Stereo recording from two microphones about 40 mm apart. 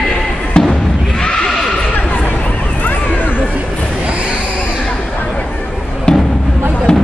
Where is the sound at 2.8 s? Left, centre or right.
Left.